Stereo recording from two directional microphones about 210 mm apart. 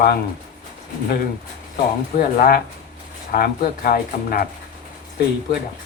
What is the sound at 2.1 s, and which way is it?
Speech, 45° left (ahead or behind).